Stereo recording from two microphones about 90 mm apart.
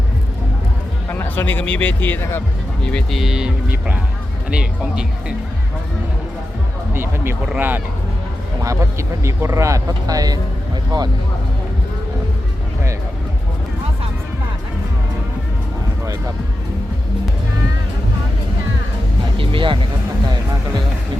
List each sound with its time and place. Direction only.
1.1 s speech: 20° left (ahead or behind)
2.8 s speech: 5° left (ahead or behind); by 5.0 s 10° right (ahead or behind)
6.9 s speech: 25° right (ahead or behind)
8.6 s speech: 35° right (ahead or behind)
10.9 s speech: 55° right (ahead or behind)
19.4 s speech: 70° right (ahead or behind)